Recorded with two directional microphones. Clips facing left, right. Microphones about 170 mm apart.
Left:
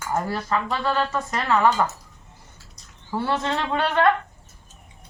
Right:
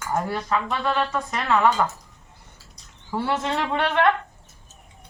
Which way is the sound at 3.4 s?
5° right (ahead or behind).